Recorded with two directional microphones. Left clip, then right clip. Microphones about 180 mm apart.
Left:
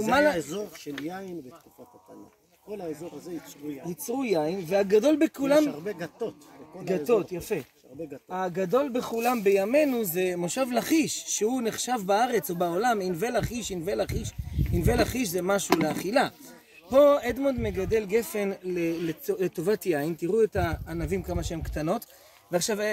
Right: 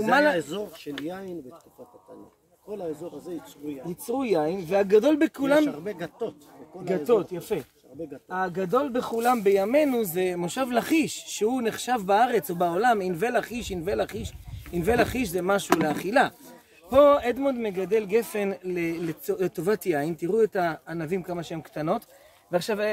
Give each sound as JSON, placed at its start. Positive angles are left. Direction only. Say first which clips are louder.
{"t": 0.2, "sound": "speech", "louder": "right 1 dB", "side_deg": 0}
{"t": 4.2, "sound": "speech", "louder": "right 2 dB", "side_deg": -5}